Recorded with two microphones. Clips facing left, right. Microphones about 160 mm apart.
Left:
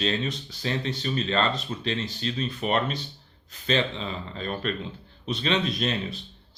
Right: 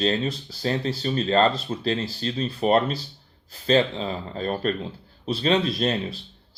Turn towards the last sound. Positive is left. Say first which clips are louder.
# right 4 dB
turn(degrees=-35)  # may be behind; listen again after turning